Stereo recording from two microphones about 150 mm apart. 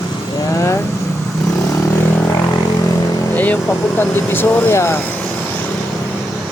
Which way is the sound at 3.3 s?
10° left (ahead or behind).